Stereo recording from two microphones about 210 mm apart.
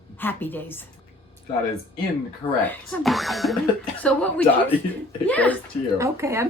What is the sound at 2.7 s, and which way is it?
A woman's voice, 5° left (ahead or behind).